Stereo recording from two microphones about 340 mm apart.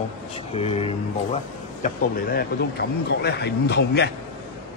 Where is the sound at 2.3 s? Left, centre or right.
Left.